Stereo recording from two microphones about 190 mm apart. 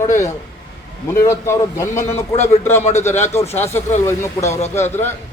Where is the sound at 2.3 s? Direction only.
35° left (ahead or behind).